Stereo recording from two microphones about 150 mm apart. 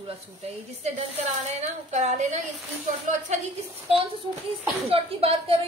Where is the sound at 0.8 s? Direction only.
45° right (ahead or behind).